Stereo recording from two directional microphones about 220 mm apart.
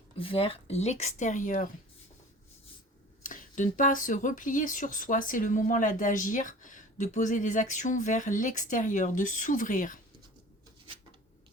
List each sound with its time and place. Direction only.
0.2 s speech: 25° left (ahead or behind)
3.2 s speech: 35° left (ahead or behind)